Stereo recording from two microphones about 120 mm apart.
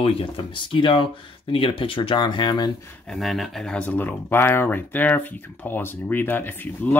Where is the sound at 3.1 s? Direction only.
Centre (ahead or behind).